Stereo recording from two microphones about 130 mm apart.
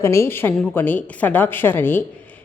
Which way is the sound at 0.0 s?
20° left (ahead or behind).